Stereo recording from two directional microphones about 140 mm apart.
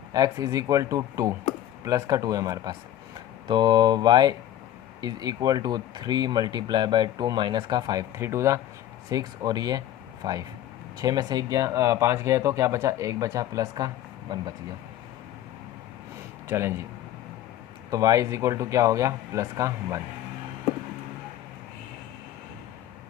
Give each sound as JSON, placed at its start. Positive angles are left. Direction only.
{"t": 0.1, "sound": "speech", "side_deg": -25}
{"t": 16.5, "sound": "speech", "side_deg": -20}
{"t": 17.9, "sound": "speech", "side_deg": -25}